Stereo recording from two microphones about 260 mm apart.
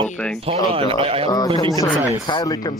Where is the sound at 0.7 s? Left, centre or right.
Right.